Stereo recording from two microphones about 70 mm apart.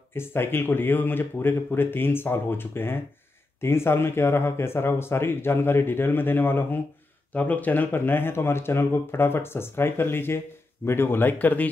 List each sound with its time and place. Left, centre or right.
0.1 s speech: left